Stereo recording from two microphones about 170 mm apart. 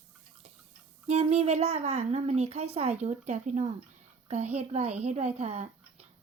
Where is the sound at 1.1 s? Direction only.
40° right (ahead or behind).